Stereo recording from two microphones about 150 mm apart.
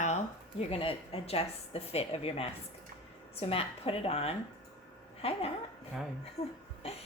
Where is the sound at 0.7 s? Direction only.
40° left (ahead or behind).